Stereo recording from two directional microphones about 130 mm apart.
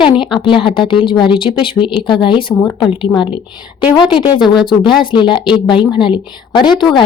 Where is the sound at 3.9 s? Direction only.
35° left (ahead or behind).